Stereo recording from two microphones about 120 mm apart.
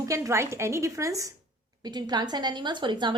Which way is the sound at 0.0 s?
25° right (ahead or behind).